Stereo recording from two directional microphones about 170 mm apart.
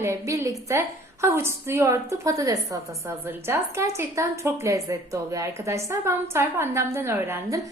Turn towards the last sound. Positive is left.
turn(degrees=-15)  # may be behind; listen again after turning